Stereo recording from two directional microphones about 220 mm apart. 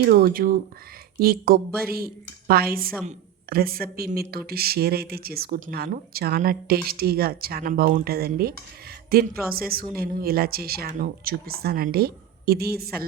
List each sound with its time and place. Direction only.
0.0 s speech: 45° right (ahead or behind)